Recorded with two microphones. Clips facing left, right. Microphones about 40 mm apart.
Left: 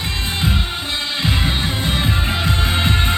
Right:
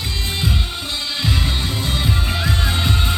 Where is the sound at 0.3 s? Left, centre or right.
Left.